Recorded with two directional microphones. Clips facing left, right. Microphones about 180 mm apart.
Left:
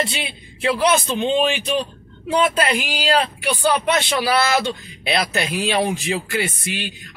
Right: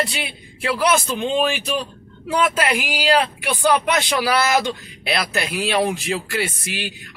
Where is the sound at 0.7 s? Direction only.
25° left (ahead or behind).